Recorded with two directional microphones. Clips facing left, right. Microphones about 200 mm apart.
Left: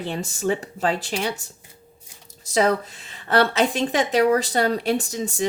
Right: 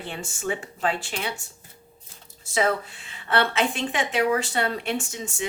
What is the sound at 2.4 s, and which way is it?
Speech, 40° left (ahead or behind).